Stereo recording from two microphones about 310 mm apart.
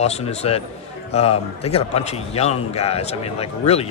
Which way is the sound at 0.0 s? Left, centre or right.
Centre.